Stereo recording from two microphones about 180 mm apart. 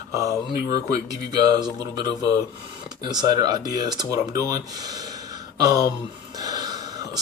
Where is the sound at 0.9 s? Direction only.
20° right (ahead or behind).